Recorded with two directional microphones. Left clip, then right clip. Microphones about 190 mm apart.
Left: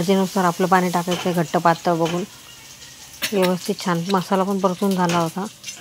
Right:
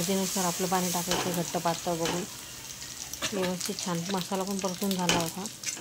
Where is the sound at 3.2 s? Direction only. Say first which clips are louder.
Left 11 dB; 15° left (ahead or behind).